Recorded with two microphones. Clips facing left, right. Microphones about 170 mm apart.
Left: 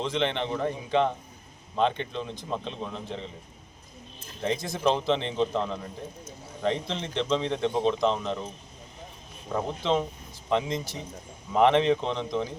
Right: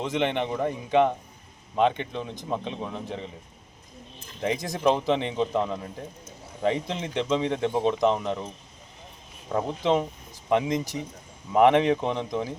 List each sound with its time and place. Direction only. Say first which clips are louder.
0.0 s speech: right 2 dB; 15° right (ahead or behind)
4.4 s speech: right 2 dB; 15° right (ahead or behind)
9.8 s speech: right 3 dB; 15° right (ahead or behind)